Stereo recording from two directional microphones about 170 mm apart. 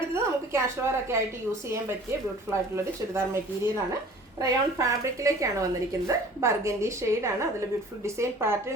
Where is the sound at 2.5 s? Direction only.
15° right (ahead or behind).